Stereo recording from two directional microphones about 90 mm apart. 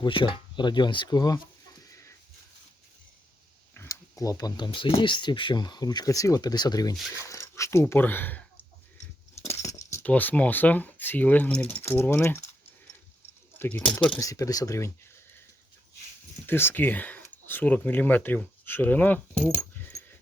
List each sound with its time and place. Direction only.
0.0 s speech: 65° left (ahead or behind); by 1.4 s 50° left (ahead or behind)
1.9 s a sound: 35° left (ahead or behind)
3.8 s speech: 40° left (ahead or behind)
7.1 s speech: 35° left (ahead or behind)
9.5 s keys jangling: 30° left (ahead or behind)
10.0 s speech: 15° left (ahead or behind)
11.8 s speech: 25° left (ahead or behind)
13.6 s speech: 20° left (ahead or behind)
13.8 s speech: 10° left (ahead or behind)
14.2 s speech: 40° left (ahead or behind)
16.5 s speech: 25° left (ahead or behind)